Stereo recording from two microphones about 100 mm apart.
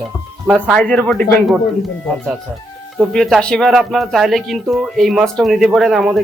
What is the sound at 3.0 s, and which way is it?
Speech, 5° left (ahead or behind).